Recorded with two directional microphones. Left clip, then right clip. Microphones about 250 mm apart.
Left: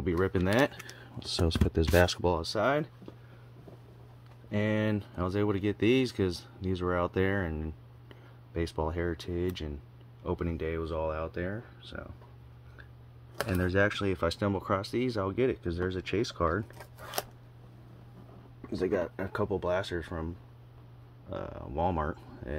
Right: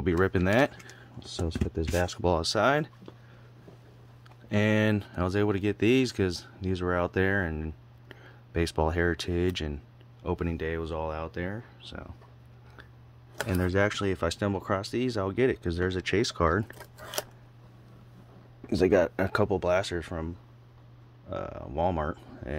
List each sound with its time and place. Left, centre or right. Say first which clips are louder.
0.0 s speech: right 3 dB; right
0.9 s speech: left 4 dB; centre
2.2 s speech: right 3 dB; right
4.5 s speech: right 5 dB; right
8.5 s speech: right 5 dB; right
13.5 s speech: right 1 dB; centre
17.2 s scissors: right 1 dB; centre
18.7 s speech: right 7 dB; right
21.3 s speech: right 3 dB; centre